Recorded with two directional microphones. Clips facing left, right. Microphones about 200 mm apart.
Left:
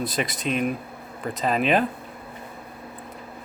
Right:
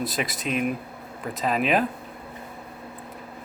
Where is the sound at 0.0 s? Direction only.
Centre (ahead or behind).